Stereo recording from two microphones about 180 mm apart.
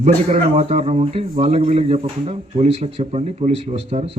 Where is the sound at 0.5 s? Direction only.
35° right (ahead or behind).